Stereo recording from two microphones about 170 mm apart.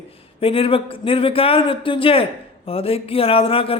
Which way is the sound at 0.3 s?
35° left (ahead or behind).